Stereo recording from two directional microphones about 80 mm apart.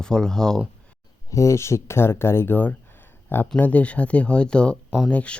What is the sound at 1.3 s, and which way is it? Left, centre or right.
Speech, left.